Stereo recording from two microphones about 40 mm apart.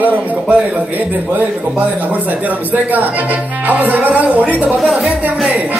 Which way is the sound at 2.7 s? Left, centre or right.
Right.